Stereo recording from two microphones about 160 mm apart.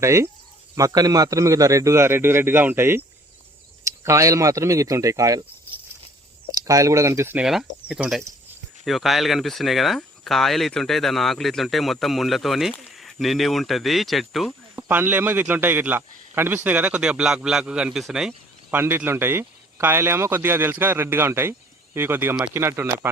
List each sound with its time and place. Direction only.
0.0 s a man's voice: 20° right (ahead or behind)
6.5 s speech: 20° right (ahead or behind)
7.4 s speech: 5° right (ahead or behind)
14.8 s a man's voice: 10° right (ahead or behind)